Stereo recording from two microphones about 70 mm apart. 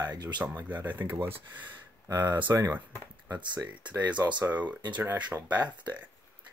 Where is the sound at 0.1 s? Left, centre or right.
Right.